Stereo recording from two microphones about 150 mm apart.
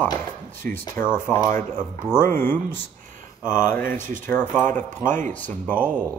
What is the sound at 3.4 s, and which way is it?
Mantra, 5° right (ahead or behind).